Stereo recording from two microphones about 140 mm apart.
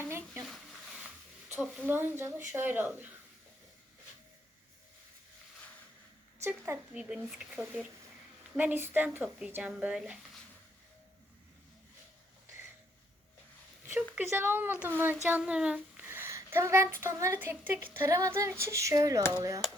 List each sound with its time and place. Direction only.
1.9 s speech: 15° right (ahead or behind)
6.4 s speech: 15° right (ahead or behind)
7.0 s speech: 5° right (ahead or behind)
13.8 s speech: 15° right (ahead or behind)